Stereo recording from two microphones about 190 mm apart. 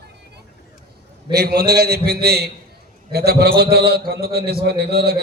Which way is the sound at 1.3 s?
60° right (ahead or behind).